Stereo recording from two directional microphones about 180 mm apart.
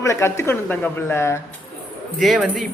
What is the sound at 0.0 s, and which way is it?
A woman's voice, 15° left (ahead or behind).